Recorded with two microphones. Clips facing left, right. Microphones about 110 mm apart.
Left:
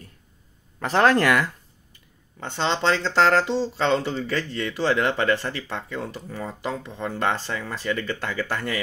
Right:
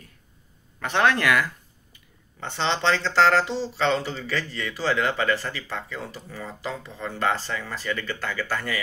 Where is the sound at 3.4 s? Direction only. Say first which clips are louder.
Left 2 dB; 45° left (ahead or behind).